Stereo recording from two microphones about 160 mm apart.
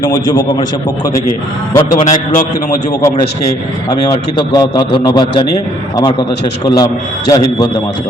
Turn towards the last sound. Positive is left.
turn(degrees=25)  # may be behind; listen again after turning